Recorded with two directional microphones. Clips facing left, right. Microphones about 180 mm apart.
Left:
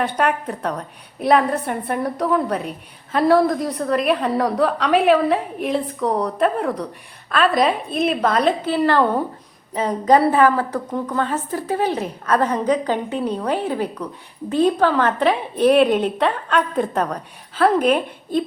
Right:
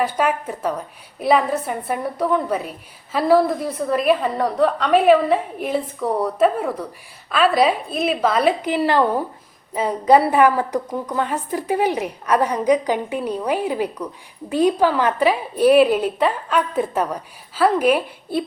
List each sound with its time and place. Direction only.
0.0 s a woman's voice: 5° right (ahead or behind)